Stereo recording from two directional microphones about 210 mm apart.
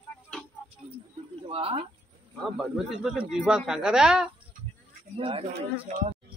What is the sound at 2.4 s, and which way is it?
Speech, 5° right (ahead or behind).